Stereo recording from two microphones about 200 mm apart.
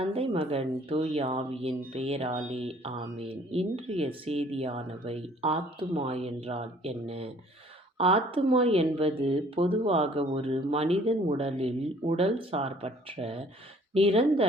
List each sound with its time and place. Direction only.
0.0 s speech: 30° right (ahead or behind)